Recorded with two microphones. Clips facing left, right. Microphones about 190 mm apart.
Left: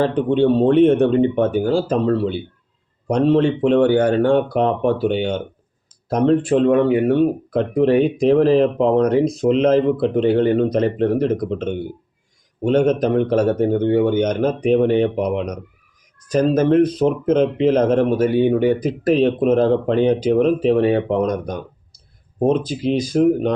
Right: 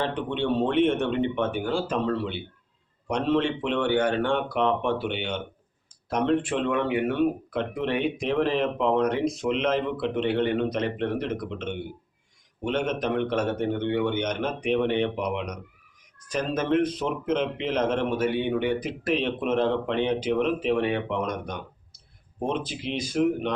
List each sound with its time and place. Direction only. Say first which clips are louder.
0.0 s speech: left 11 dB; 40° left (ahead or behind)